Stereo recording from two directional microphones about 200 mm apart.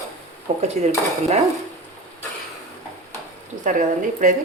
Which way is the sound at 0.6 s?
35° right (ahead or behind).